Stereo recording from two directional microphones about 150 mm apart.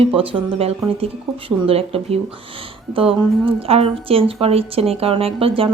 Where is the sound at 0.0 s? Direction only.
40° right (ahead or behind).